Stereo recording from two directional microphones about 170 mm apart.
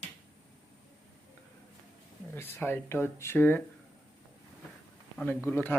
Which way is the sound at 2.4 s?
10° left (ahead or behind).